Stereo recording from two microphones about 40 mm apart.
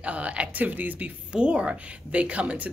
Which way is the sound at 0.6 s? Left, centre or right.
Right.